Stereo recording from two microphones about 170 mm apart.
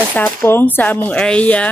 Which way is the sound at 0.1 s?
10° left (ahead or behind).